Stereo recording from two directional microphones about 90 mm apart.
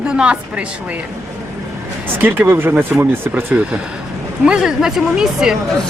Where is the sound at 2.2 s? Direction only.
20° right (ahead or behind).